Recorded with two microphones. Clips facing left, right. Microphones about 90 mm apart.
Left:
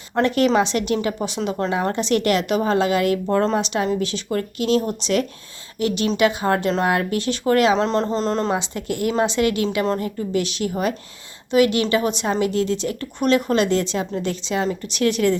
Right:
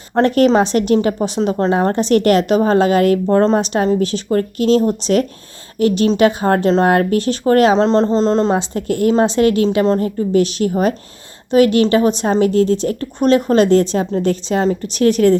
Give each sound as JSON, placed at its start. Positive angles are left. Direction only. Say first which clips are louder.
{"t": 0.1, "sound": "a woman's voice", "louder": "right 6 dB", "side_deg": -40}
{"t": 10.0, "sound": "a woman's voice", "louder": "right 8 dB", "side_deg": -40}